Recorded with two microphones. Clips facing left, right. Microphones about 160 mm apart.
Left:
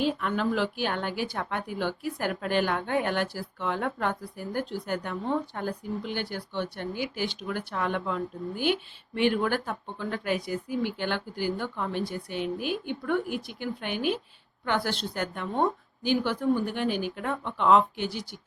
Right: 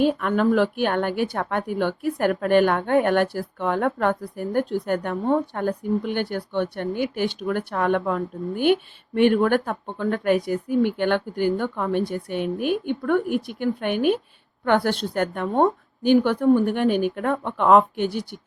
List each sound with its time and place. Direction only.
0.0 s a woman's voice: 55° right (ahead or behind)